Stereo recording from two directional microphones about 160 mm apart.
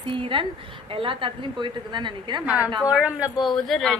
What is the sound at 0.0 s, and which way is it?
A woman's voice, 30° right (ahead or behind).